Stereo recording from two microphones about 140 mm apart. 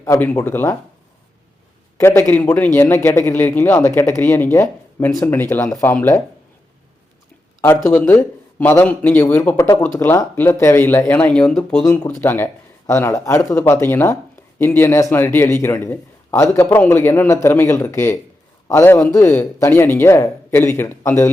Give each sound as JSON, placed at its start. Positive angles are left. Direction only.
{"t": 0.0, "sound": "a man's voice", "side_deg": 15}
{"t": 2.0, "sound": "a man's voice", "side_deg": 15}
{"t": 7.9, "sound": "a man's voice", "side_deg": 10}
{"t": 11.9, "sound": "a man's voice", "side_deg": 15}